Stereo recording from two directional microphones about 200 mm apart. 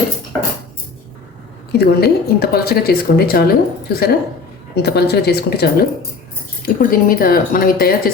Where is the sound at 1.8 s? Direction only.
50° left (ahead or behind).